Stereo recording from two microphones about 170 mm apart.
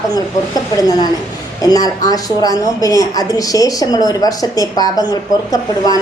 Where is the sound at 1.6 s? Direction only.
20° left (ahead or behind).